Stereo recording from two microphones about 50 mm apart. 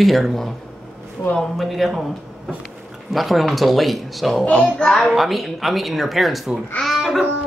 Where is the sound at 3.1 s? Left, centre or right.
Centre.